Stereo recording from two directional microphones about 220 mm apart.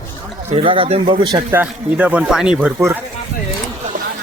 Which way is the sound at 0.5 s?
25° right (ahead or behind).